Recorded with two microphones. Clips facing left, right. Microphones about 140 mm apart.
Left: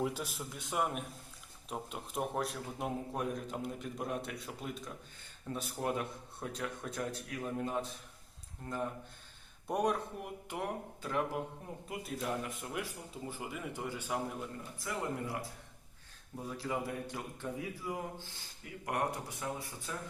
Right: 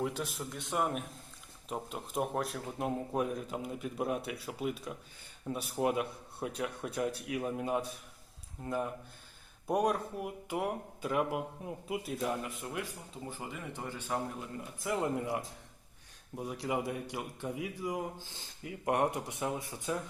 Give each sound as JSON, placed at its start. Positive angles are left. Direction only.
{"t": 0.0, "sound": "a man's voice", "side_deg": 0}
{"t": 14.8, "sound": "speech", "side_deg": -20}
{"t": 16.6, "sound": "a man's voice", "side_deg": -15}